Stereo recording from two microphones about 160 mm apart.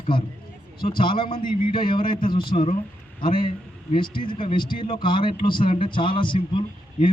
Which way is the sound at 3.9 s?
30° left (ahead or behind).